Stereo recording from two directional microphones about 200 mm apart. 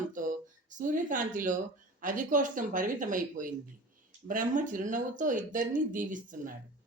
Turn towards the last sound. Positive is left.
turn(degrees=-40)  # may be behind; listen again after turning